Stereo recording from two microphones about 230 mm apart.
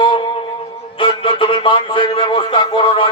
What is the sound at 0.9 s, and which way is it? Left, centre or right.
A man's voice, left.